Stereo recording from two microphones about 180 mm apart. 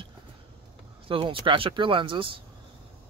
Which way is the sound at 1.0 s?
30° right (ahead or behind).